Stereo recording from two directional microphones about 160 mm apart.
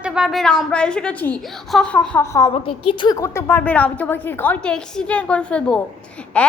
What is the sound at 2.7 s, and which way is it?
A woman's voice, 30° left (ahead or behind).